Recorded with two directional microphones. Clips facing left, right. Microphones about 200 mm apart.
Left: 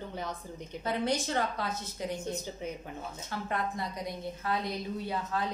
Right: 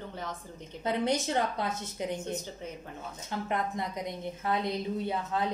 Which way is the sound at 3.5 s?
20° right (ahead or behind).